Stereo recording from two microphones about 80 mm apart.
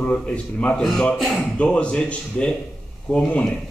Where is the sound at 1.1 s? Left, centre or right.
Centre.